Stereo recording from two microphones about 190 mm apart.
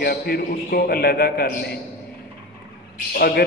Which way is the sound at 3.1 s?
55° left (ahead or behind).